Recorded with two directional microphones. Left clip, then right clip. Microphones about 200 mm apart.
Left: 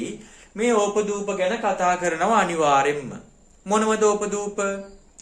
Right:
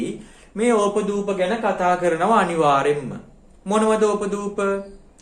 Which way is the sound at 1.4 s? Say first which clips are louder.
Even; 20° left (ahead or behind).